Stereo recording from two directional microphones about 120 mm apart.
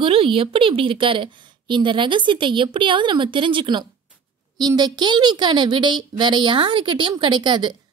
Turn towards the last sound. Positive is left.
turn(degrees=-40)  # may be behind; listen again after turning